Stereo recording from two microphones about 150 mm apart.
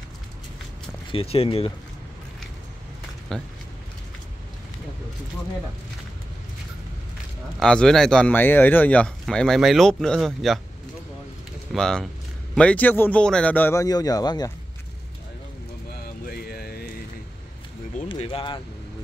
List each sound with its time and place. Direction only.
1.1 s speech: 40° left (ahead or behind)
3.3 s speech: 5° left (ahead or behind)
7.5 s speech: 5° left (ahead or behind)
11.7 s a man's voice: centre (ahead or behind); by 14.5 s 25° left (ahead or behind)
16.3 s a sound: 90° left
18.1 s a sound: 40° left (ahead or behind)